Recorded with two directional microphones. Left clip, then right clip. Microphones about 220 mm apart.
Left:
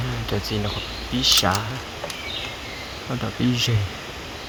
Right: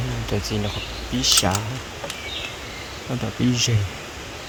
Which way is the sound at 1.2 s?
55° right (ahead or behind).